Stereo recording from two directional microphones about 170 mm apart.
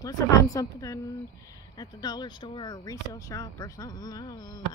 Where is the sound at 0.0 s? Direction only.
20° left (ahead or behind).